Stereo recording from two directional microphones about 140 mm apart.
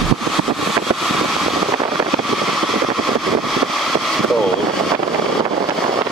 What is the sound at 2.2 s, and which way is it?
Vehicle, centre (ahead or behind).